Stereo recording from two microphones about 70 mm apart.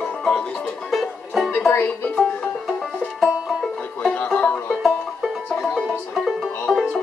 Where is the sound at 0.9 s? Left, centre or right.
Centre.